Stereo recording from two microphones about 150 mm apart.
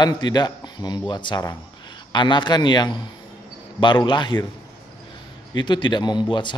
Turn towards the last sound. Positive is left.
turn(degrees=30)  # may be behind; listen again after turning